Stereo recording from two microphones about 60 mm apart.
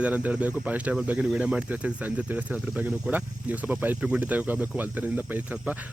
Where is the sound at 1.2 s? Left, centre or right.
Centre.